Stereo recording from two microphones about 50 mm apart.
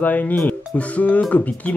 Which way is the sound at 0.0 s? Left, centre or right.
Left.